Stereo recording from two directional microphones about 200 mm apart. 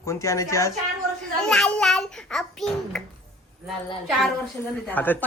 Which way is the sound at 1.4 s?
5° left (ahead or behind).